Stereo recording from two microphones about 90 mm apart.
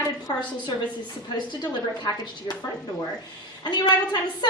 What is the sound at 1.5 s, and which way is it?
Speech, 50° left (ahead or behind).